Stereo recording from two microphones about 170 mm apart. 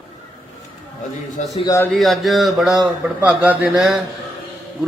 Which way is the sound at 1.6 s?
20° left (ahead or behind).